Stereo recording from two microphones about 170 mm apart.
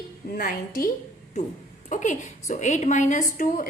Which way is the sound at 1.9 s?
45° left (ahead or behind).